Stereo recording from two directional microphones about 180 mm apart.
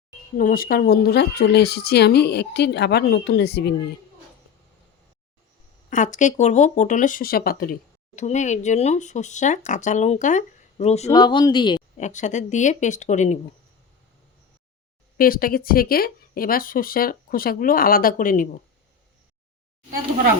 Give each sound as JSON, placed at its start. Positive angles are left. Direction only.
{"t": 0.3, "sound": "speech", "side_deg": 50}
{"t": 5.9, "sound": "speech", "side_deg": 45}
{"t": 11.1, "sound": "speech", "side_deg": 25}
{"t": 11.9, "sound": "speech", "side_deg": 40}
{"t": 15.2, "sound": "speech", "side_deg": 55}